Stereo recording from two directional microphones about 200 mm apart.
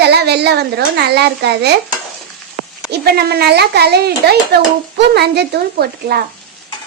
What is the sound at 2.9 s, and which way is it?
A child's voice, 50° right (ahead or behind).